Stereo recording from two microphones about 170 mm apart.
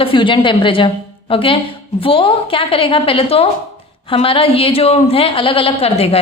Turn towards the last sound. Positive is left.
turn(degrees=35)  # may be behind; listen again after turning